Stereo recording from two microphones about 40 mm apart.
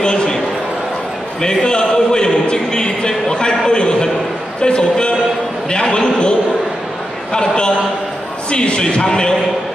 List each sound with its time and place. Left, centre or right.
0.0 s a sound: centre
1.4 s a man's voice: centre
7.3 s speech: left